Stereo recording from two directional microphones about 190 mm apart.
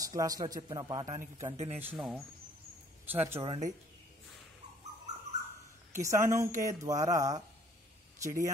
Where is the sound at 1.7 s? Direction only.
5° right (ahead or behind).